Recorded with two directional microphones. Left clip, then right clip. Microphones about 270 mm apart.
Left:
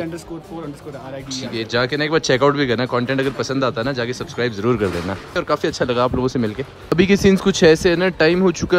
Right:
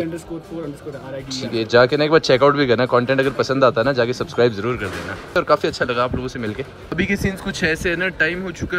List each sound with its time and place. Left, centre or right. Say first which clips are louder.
1.3 s speech: right 6 dB; centre